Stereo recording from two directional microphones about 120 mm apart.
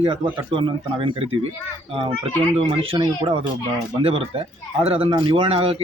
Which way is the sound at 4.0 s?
55° right (ahead or behind).